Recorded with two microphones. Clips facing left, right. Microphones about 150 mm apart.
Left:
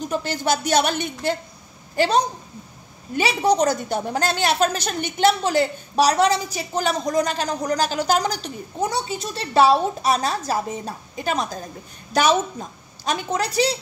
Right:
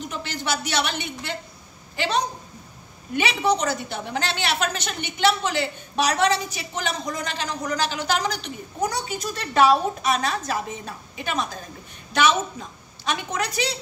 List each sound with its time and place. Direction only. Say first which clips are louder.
0.1 s a woman's voice: left 7 dB; 45° left (ahead or behind)